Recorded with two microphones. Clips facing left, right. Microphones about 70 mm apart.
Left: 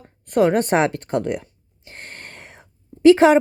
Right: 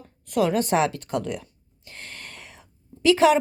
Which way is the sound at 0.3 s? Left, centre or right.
Left.